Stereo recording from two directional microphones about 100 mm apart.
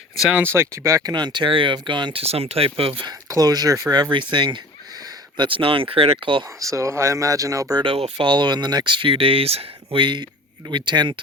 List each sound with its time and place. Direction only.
0.3 s speech: 25° right (ahead or behind)
1.1 s speech: 50° right (ahead or behind)
2.2 s speech: 90° right; by 3.1 s 65° right (ahead or behind)
3.1 s speech: 40° right (ahead or behind)
4.1 s speech: 50° right (ahead or behind)
5.4 s speech: 60° right (ahead or behind)
6.6 s speech: 30° right (ahead or behind)
7.8 s speech: 70° right (ahead or behind)
8.3 s speech: 50° right (ahead or behind); by 10.0 s 75° right (ahead or behind)
10.0 s speech: 50° right (ahead or behind)